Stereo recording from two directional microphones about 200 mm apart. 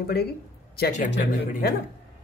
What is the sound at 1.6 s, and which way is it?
Speech, 55° left (ahead or behind).